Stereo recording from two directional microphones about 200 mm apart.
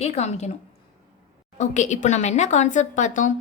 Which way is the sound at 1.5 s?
35° left (ahead or behind).